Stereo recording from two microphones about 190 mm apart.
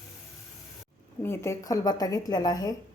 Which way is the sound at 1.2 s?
15° left (ahead or behind).